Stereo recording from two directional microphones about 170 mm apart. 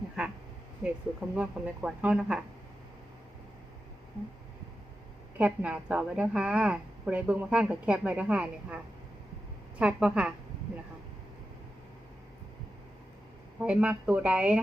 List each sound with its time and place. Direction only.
0.2 s a woman's voice: 5° right (ahead or behind)
5.4 s a woman's voice: 10° right (ahead or behind)
13.6 s a woman's voice: 5° right (ahead or behind)